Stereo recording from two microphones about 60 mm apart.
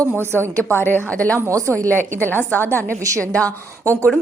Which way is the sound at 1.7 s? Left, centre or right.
Left.